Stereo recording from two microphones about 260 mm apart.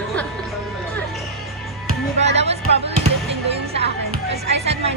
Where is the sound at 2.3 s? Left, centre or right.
Right.